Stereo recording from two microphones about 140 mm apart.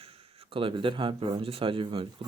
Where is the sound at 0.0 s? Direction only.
45° right (ahead or behind).